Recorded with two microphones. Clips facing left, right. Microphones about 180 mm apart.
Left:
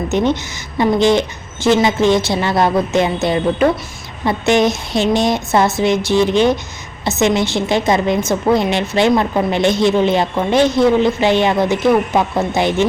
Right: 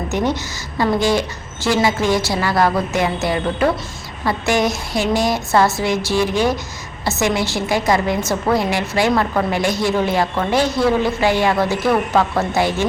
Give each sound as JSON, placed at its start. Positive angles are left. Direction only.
{"t": 0.1, "sound": "a woman's voice", "side_deg": 20}